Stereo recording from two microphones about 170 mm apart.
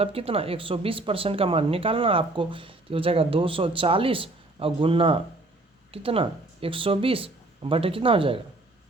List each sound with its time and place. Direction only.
0.0 s speech: 35° right (ahead or behind)